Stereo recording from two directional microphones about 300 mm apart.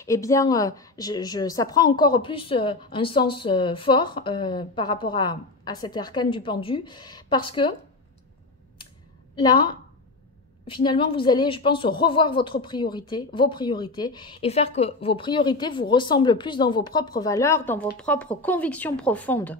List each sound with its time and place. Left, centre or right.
0.0 s a woman's voice: centre
9.3 s a woman's voice: centre